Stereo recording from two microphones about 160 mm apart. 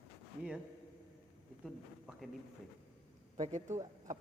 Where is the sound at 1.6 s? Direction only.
Centre (ahead or behind).